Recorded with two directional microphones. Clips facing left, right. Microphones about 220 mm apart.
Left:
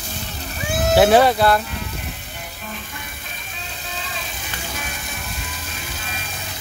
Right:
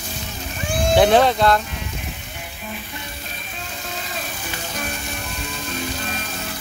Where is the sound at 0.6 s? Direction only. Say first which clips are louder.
Left 1 dB; 5° left (ahead or behind).